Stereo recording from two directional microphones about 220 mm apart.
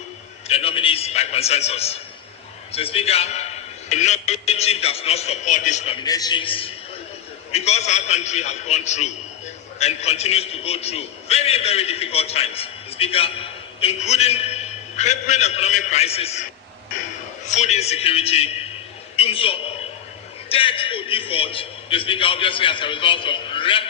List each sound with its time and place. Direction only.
0.4 s a man's voice: 25° left (ahead or behind)
17.4 s a man's voice: 30° left (ahead or behind)